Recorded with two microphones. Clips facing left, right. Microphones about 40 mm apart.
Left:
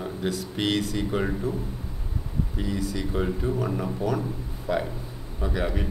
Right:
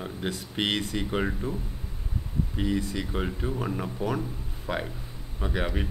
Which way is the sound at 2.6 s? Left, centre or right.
Right.